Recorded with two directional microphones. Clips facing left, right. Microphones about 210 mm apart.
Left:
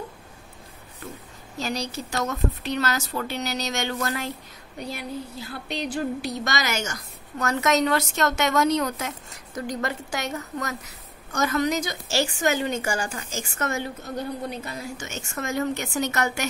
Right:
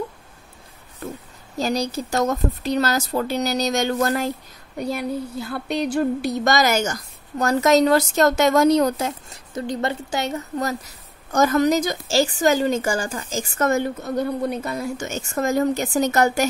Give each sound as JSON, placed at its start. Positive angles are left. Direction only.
{"t": 1.6, "sound": "a woman's voice", "side_deg": -40}
{"t": 4.7, "sound": "a woman's voice", "side_deg": -50}
{"t": 15.0, "sound": "a woman's voice", "side_deg": -35}